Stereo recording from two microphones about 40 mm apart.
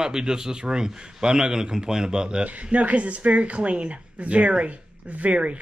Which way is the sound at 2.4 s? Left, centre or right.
Right.